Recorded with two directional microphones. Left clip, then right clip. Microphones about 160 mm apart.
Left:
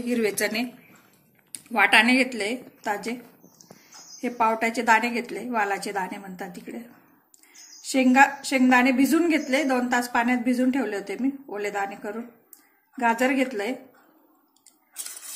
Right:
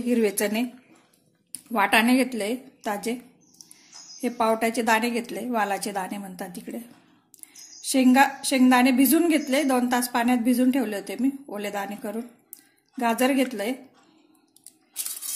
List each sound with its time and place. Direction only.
0.0 s a woman's voice: 70° right (ahead or behind)
4.2 s a woman's voice: 60° right (ahead or behind)
7.8 s a woman's voice: 60° right (ahead or behind)